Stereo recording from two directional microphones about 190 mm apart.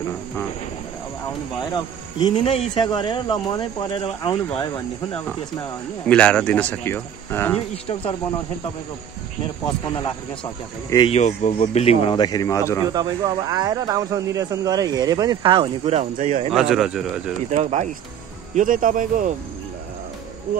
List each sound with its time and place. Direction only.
2.1 s speech: 30° left (ahead or behind)
6.0 s speech: 5° left (ahead or behind)
7.5 s speech: 30° left (ahead or behind)
11.1 s speech: 35° left (ahead or behind); by 12.8 s 15° left (ahead or behind)
12.9 s speech: 20° right (ahead or behind); by 16.5 s 40° right (ahead or behind)
16.5 s speech: 5° right (ahead or behind)
17.6 s speech: 35° right (ahead or behind)
18.5 s speech: 45° right (ahead or behind)